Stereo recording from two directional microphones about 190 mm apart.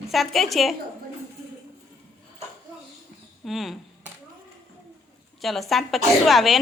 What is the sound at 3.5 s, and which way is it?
Speech, centre (ahead or behind).